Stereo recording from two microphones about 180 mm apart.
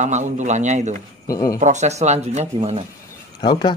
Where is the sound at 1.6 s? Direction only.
40° right (ahead or behind).